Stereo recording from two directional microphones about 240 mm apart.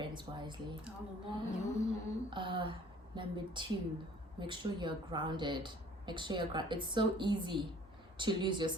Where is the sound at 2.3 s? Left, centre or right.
Right.